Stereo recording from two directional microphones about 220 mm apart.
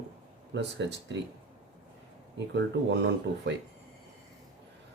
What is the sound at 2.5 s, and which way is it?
Speech, 55° right (ahead or behind).